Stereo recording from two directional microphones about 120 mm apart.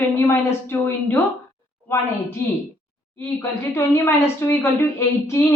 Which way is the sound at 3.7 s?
25° left (ahead or behind).